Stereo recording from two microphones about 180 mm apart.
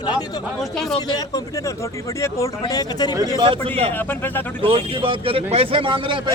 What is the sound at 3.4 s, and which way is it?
Speech, 30° right (ahead or behind).